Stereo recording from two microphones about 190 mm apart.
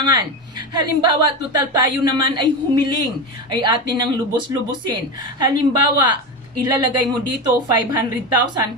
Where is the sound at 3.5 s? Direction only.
25° right (ahead or behind).